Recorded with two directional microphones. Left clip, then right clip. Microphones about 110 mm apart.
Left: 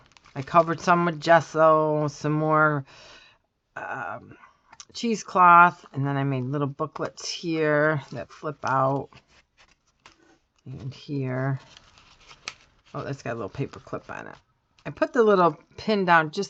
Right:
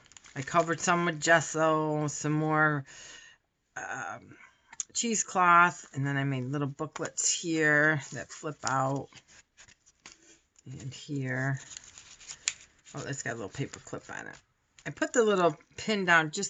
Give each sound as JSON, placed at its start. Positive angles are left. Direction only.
{"t": 0.4, "sound": "speech", "side_deg": 50}
{"t": 10.8, "sound": "speech", "side_deg": 60}
{"t": 12.0, "sound": "scissors", "side_deg": 5}
{"t": 12.9, "sound": "speech", "side_deg": 60}